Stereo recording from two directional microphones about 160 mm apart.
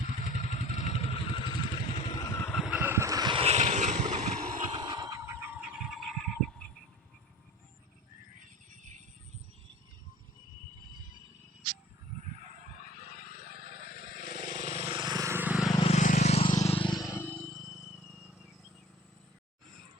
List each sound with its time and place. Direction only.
0.2 s motorcycle: 45° left (ahead or behind)
1.9 s vehicle: 25° left (ahead or behind)
2.6 s vehicle: 10° right (ahead or behind); by 3.4 s 25° right (ahead or behind)
3.4 s vehicle: 45° right (ahead or behind)
4.7 s a sound: 25° right (ahead or behind); by 6.7 s 5° left (ahead or behind)
13.4 s vehicle: 35° right (ahead or behind)
14.3 s vehicle: 55° right (ahead or behind); by 15.7 s 10° right (ahead or behind)
15.7 s vehicle: 35° left (ahead or behind)
16.0 s vehicle: 50° left (ahead or behind)
16.6 s a sound: 35° left (ahead or behind)
17.2 s vehicle: 10° left (ahead or behind)